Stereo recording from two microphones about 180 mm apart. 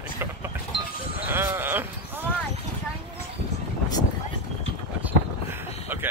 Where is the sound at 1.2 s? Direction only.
10° right (ahead or behind).